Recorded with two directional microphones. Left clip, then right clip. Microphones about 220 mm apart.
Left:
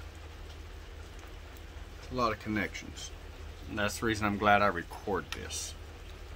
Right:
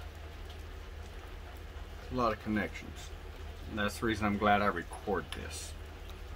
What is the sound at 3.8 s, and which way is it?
Speech, 25° left (ahead or behind).